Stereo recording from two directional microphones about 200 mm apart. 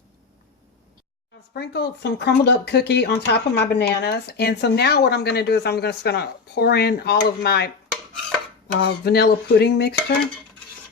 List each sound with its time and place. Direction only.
1.5 s speech: 55° left (ahead or behind)